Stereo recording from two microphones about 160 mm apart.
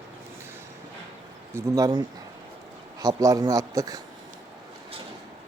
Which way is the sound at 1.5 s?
20° right (ahead or behind).